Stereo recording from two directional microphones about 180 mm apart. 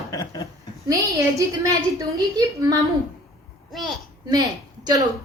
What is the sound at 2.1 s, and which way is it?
Speech, 20° right (ahead or behind).